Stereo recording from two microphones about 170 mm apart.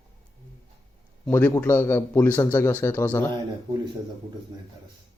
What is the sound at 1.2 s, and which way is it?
A man's voice, 10° left (ahead or behind).